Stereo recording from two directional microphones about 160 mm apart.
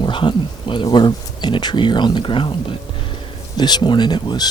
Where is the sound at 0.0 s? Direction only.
30° left (ahead or behind).